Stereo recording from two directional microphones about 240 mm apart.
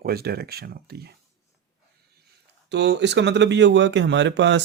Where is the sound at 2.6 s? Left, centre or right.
Right.